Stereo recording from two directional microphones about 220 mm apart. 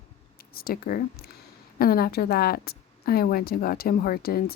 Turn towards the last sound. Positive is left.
turn(degrees=45)  # may be behind; listen again after turning